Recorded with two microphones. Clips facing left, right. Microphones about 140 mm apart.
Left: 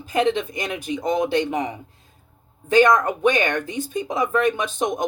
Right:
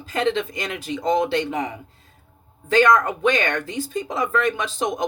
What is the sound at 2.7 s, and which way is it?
Speech, 20° left (ahead or behind).